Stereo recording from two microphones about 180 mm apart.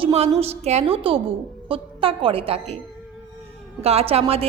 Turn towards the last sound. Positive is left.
turn(degrees=-35)  # may be behind; listen again after turning